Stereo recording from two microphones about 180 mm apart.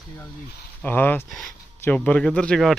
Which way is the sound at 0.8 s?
10° left (ahead or behind).